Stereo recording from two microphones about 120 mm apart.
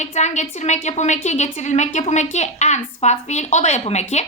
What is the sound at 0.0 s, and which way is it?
A woman's voice, 75° left (ahead or behind).